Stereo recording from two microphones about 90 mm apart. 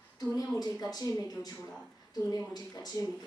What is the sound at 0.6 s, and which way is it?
A woman's voice, 45° left (ahead or behind).